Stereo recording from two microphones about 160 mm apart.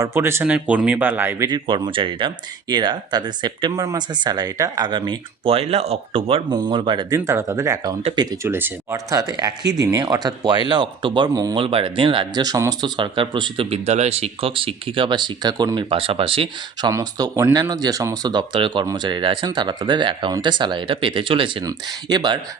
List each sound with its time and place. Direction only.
0.0 s speech: 15° right (ahead or behind)
1.5 s speech: 30° right (ahead or behind)
8.4 s speech: 15° right (ahead or behind)